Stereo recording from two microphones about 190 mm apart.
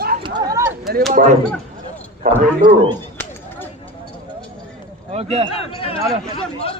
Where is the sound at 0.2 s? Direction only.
25° right (ahead or behind).